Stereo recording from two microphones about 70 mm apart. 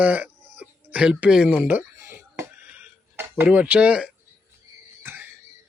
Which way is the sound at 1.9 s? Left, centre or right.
Right.